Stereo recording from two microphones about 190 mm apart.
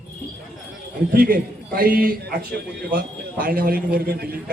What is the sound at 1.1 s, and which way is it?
A man's voice, 50° right (ahead or behind).